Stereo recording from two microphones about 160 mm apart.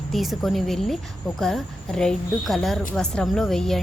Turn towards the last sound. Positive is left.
turn(degrees=0)  # may be behind; listen again after turning